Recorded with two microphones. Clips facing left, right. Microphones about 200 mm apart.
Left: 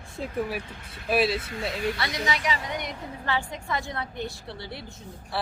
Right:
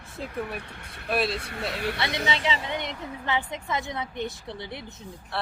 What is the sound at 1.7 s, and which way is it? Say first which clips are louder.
Speech: left 2 dB; 65° right (ahead or behind).